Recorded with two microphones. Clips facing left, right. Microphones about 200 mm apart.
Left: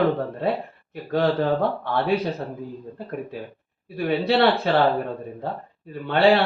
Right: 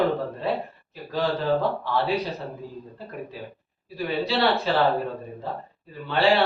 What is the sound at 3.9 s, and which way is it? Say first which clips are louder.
Speech: left 5 dB; 55° left (ahead or behind).